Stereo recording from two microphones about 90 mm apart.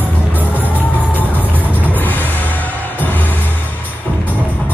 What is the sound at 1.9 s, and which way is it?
Music, 20° left (ahead or behind).